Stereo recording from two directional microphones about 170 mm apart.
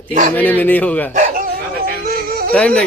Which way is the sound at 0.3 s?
10° left (ahead or behind).